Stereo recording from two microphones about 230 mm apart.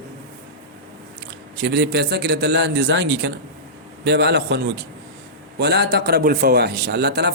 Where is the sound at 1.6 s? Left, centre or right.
Right.